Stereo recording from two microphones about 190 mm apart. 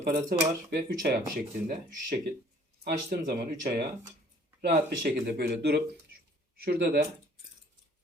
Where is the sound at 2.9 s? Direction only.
50° right (ahead or behind).